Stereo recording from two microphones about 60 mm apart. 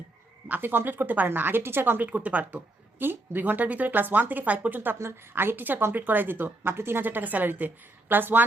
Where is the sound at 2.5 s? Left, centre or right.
Right.